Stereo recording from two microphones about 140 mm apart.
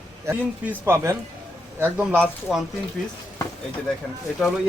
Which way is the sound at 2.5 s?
5° right (ahead or behind).